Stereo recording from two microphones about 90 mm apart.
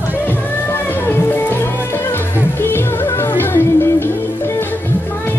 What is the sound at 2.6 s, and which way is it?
Music, 25° left (ahead or behind).